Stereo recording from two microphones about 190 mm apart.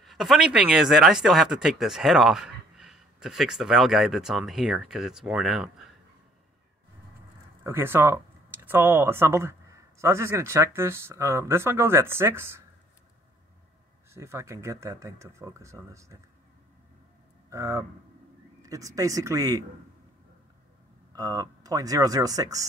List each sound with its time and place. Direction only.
0.0 s speech: centre (ahead or behind)
7.6 s speech: 10° right (ahead or behind)
14.1 s speech: 15° right (ahead or behind)
17.5 s speech: 15° right (ahead or behind)
21.1 s speech: 20° right (ahead or behind)